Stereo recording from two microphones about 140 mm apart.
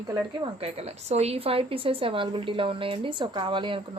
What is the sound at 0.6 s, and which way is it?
A woman's voice, 50° right (ahead or behind).